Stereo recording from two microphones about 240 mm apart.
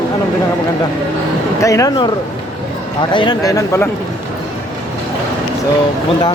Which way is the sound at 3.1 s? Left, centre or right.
Centre.